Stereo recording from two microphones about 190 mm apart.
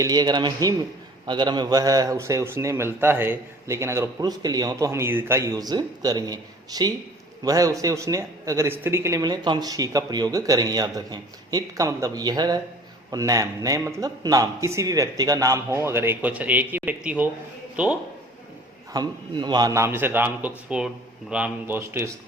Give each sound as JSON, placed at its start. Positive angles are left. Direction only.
{"t": 0.0, "sound": "a man's voice", "side_deg": -20}
{"t": 18.9, "sound": "a man's voice", "side_deg": -25}